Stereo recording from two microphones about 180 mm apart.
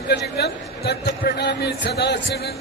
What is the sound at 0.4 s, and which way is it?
A man's voice, 65° left (ahead or behind).